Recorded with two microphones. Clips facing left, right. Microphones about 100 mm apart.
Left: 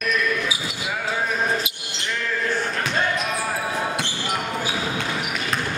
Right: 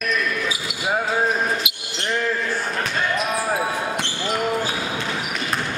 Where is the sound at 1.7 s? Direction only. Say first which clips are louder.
Right 3 dB; 35° left (ahead or behind).